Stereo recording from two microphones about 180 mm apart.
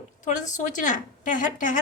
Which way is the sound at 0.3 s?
40° left (ahead or behind).